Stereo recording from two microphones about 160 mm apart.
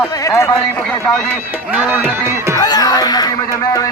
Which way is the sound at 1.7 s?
10° right (ahead or behind).